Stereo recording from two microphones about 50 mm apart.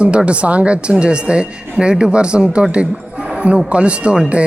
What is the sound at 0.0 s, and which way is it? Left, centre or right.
Speech, right.